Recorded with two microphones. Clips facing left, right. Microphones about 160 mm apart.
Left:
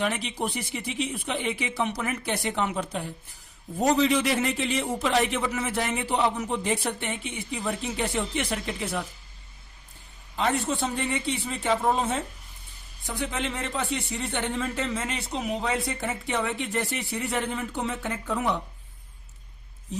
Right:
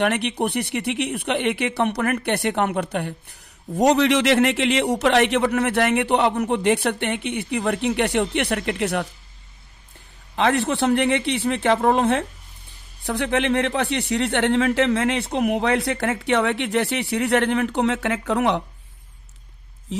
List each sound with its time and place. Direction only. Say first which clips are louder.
0.0 s speech: right 7 dB; 65° right (ahead or behind)
10.3 s speech: right 6 dB; 75° right (ahead or behind)
19.9 s speech: right 5 dB; 90° right